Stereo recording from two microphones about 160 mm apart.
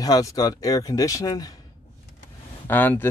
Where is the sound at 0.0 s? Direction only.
20° left (ahead or behind).